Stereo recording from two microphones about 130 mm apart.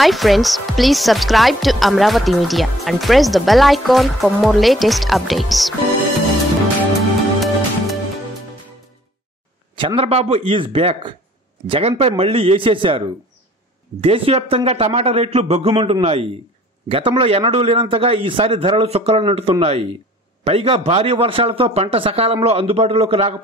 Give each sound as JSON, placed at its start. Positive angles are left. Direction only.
{"t": 0.0, "sound": "speech", "side_deg": 0}
{"t": 7.3, "sound": "music", "side_deg": 0}
{"t": 9.8, "sound": "a man's voice", "side_deg": -45}